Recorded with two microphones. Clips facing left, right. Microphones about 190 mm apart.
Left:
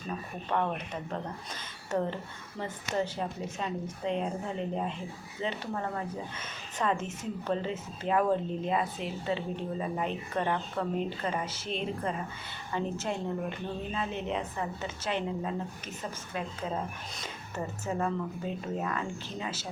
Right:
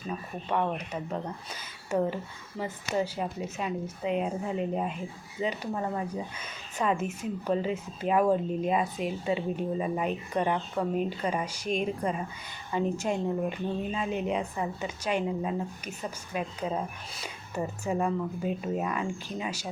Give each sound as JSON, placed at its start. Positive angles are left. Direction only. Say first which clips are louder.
{"t": 0.4, "sound": "speech", "louder": "right 2 dB", "side_deg": -10}
{"t": 1.9, "sound": "speech", "louder": "right 3 dB", "side_deg": -10}